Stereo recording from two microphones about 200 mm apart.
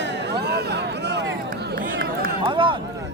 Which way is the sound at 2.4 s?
25° right (ahead or behind).